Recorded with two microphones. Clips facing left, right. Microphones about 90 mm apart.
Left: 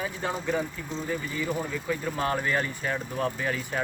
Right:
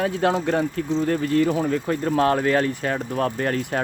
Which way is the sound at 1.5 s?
60° right (ahead or behind).